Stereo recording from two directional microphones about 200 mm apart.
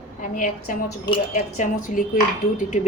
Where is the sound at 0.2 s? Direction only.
40° left (ahead or behind).